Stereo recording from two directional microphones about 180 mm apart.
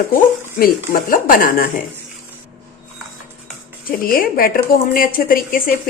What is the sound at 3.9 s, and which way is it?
Speech, 55° left (ahead or behind).